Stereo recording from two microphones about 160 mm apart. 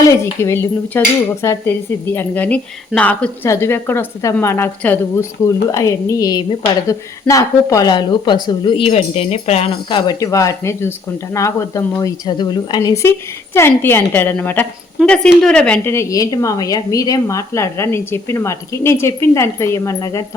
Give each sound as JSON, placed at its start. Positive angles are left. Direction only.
{"t": 0.0, "sound": "cutlery", "side_deg": 15}
{"t": 5.6, "sound": "speech", "side_deg": 20}
{"t": 10.1, "sound": "speech", "side_deg": 20}
{"t": 11.3, "sound": "cutlery", "side_deg": 20}